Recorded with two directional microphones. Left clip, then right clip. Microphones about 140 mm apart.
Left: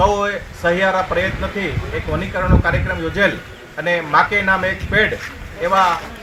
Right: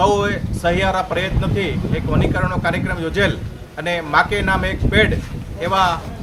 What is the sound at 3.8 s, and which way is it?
Speech, 40° right (ahead or behind).